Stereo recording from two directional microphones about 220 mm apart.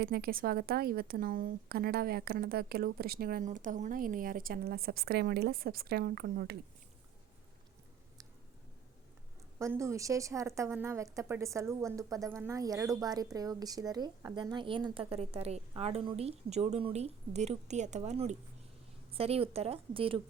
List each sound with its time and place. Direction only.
0.0 s a woman's voice: 45° right (ahead or behind)
9.6 s a woman's voice: 15° right (ahead or behind)